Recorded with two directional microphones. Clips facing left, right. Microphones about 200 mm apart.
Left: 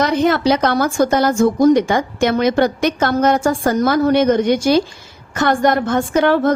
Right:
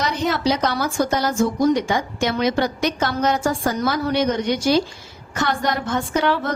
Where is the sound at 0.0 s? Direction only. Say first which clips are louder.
Left 6 dB; 55° left (ahead or behind).